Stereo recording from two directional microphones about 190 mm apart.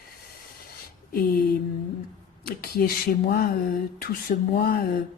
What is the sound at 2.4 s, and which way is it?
Speech, 55° left (ahead or behind).